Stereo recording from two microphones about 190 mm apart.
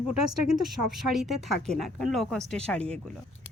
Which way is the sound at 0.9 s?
Centre (ahead or behind).